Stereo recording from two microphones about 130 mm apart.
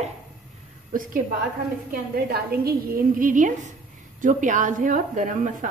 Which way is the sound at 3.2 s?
90° right.